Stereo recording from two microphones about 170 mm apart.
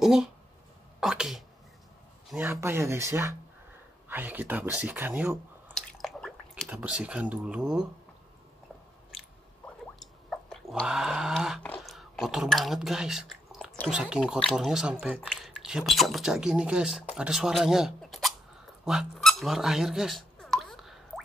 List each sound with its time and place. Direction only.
0.0 s speech: 5° right (ahead or behind)
2.3 s speech: 15° right (ahead or behind)
5.8 s drip: centre (ahead or behind)
9.9 s a sound: centre (ahead or behind)
11.8 s speech: centre (ahead or behind)
18.9 s a sound: centre (ahead or behind)